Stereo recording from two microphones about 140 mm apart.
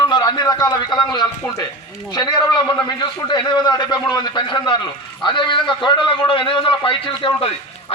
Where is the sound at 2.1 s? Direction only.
30° left (ahead or behind).